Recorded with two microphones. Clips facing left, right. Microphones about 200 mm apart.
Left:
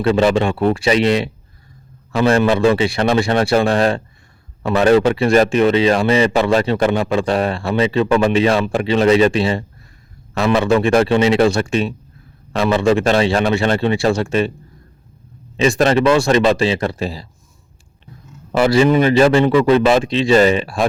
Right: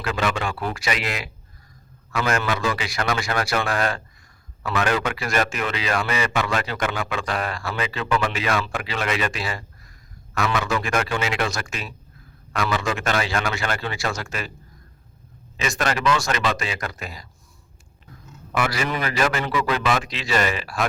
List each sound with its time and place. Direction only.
0.0 s a man's voice: 30° left (ahead or behind)
15.5 s a man's voice: 30° left (ahead or behind)
18.5 s a man's voice: 30° left (ahead or behind)